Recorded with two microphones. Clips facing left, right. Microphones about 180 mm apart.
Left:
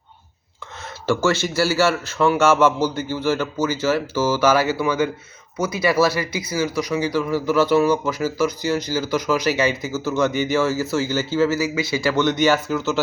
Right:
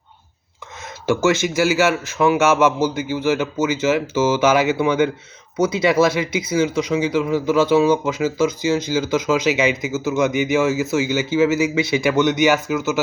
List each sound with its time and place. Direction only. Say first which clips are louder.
1.0 s speech: right 2 dB; 20° right (ahead or behind)